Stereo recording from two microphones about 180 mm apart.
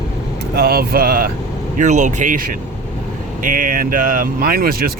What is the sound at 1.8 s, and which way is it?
Speech, 45° right (ahead or behind).